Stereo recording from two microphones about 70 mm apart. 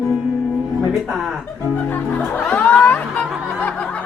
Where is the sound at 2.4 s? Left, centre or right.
Left.